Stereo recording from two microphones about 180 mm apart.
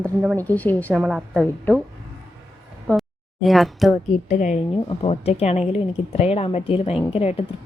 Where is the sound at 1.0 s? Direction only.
Centre (ahead or behind).